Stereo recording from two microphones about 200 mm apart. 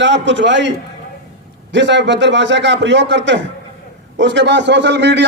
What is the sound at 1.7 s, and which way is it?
A man's voice, 60° right (ahead or behind).